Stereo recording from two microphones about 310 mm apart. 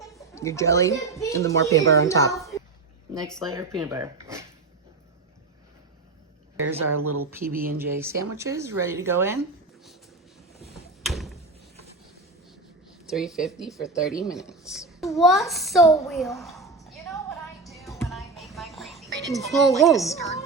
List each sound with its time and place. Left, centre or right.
0.0 s a woman's voice: centre
3.5 s speech: centre
6.9 s speech: right
7.3 s speech: centre
10.8 s a sound: centre
13.1 s a woman's voice: centre
16.8 s music: centre
19.9 s a woman's voice: centre